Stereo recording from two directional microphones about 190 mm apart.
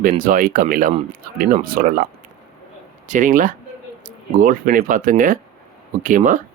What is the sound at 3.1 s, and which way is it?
Speech, 45° right (ahead or behind).